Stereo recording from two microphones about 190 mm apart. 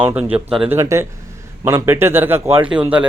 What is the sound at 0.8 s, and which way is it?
Speech, 15° right (ahead or behind).